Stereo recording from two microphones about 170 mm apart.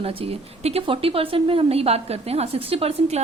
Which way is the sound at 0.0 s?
35° right (ahead or behind).